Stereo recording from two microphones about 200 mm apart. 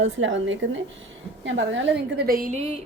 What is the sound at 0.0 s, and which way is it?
A woman's voice, 70° right (ahead or behind).